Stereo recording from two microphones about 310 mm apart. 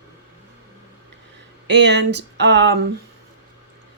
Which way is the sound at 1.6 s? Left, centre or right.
Right.